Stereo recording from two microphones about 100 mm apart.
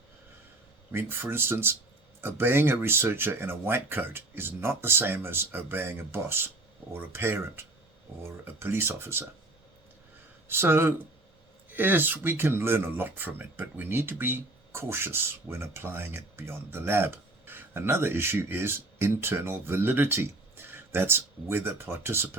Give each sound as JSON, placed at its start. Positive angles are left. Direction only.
{"t": 0.9, "sound": "speech", "side_deg": -20}
{"t": 10.5, "sound": "speech", "side_deg": -25}